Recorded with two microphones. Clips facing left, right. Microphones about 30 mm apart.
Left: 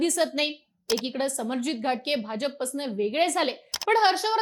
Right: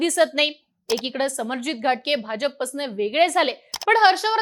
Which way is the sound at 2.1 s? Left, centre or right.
Right.